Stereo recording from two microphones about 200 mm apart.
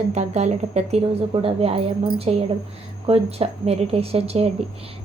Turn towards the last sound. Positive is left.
turn(degrees=-30)  # may be behind; listen again after turning